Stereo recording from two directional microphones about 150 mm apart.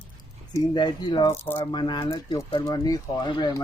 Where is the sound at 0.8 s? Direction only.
30° left (ahead or behind).